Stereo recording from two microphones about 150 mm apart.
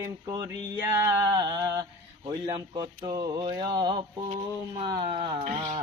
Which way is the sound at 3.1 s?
30° right (ahead or behind).